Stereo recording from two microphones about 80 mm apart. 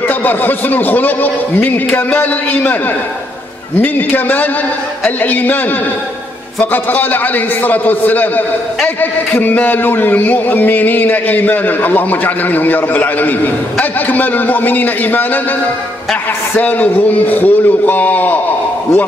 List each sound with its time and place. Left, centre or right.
0.1 s a man's voice: left
3.8 s a man's voice: left
6.6 s a man's voice: left
16.5 s a man's voice: left